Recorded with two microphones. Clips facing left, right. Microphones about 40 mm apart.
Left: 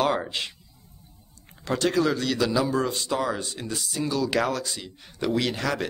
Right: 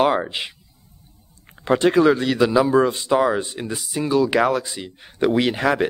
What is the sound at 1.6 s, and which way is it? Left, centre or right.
A man's voice, right.